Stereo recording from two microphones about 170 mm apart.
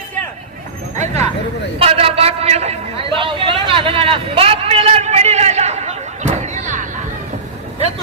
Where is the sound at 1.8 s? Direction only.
35° right (ahead or behind).